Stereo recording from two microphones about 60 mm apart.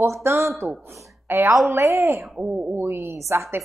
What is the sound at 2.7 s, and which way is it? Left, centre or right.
Speech, right.